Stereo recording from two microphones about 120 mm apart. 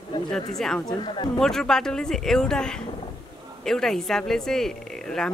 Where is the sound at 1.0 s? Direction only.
40° left (ahead or behind).